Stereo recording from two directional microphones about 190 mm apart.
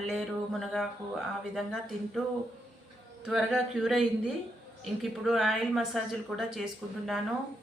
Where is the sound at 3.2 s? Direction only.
Centre (ahead or behind).